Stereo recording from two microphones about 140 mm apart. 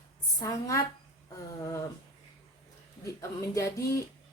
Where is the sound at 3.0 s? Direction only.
20° left (ahead or behind).